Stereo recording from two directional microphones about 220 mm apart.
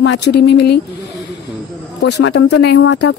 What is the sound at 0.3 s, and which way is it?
Speech, 50° left (ahead or behind).